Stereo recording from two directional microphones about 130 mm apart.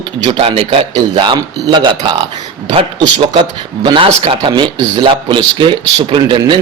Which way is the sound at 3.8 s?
40° right (ahead or behind).